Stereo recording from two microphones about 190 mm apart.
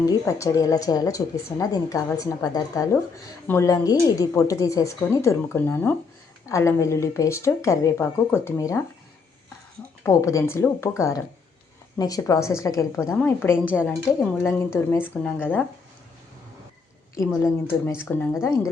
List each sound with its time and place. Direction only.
0.0 s a woman's voice: 15° left (ahead or behind)
10.0 s a woman's voice: 15° left (ahead or behind)
17.2 s a woman's voice: 15° left (ahead or behind)